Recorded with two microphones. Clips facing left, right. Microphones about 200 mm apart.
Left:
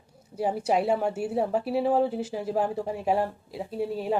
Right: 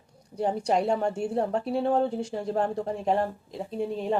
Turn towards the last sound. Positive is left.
turn(degrees=5)  # may be behind; listen again after turning